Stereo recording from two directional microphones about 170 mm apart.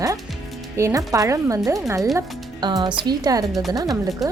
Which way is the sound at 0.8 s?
20° right (ahead or behind).